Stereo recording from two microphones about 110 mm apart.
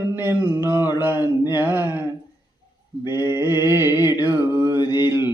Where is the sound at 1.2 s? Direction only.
20° right (ahead or behind).